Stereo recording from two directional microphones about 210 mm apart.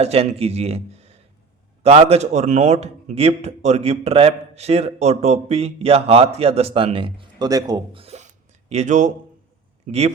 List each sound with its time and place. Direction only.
0.0 s a man's voice: 30° right (ahead or behind)